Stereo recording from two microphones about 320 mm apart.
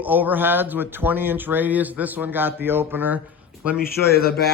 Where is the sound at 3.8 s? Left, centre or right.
Left.